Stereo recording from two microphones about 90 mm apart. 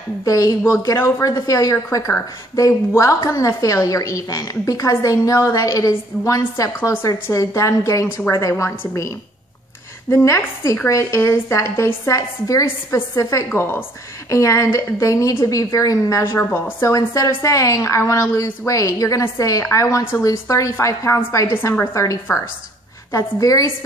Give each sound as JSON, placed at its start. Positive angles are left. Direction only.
{"t": 0.2, "sound": "a woman's voice", "side_deg": 40}
{"t": 6.8, "sound": "a woman's voice", "side_deg": 25}
{"t": 16.2, "sound": "a woman's voice", "side_deg": 25}
{"t": 16.8, "sound": "a woman's voice", "side_deg": 40}